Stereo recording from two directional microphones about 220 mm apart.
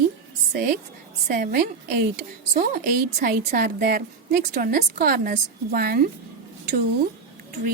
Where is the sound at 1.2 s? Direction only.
40° right (ahead or behind).